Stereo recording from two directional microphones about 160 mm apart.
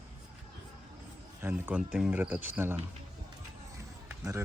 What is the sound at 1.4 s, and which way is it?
Speech, 15° right (ahead or behind).